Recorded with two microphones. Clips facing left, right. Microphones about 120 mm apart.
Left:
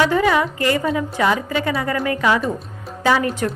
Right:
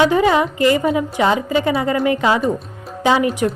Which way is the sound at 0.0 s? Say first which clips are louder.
Right 3 dB; 20° right (ahead or behind).